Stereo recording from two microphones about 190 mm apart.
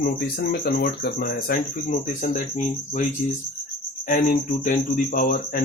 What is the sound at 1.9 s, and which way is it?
Speech, 40° left (ahead or behind).